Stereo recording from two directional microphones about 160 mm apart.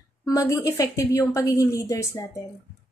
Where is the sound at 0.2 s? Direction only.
20° left (ahead or behind).